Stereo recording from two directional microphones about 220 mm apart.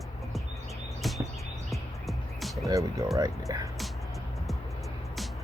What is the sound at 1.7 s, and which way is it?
Music, centre (ahead or behind).